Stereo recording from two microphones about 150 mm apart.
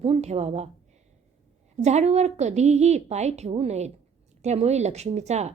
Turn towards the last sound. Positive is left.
turn(degrees=-50)  # may be behind; listen again after turning